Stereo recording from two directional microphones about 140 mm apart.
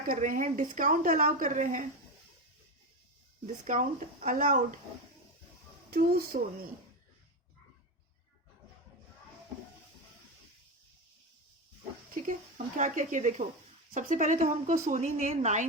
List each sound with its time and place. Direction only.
0.1 s a woman's voice: 70° right (ahead or behind)
3.4 s a woman's voice: 65° right (ahead or behind)
5.9 s speech: 90° right
12.5 s speech: 65° right (ahead or behind)